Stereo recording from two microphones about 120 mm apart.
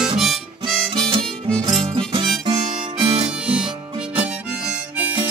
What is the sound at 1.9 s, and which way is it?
Music, 45° right (ahead or behind).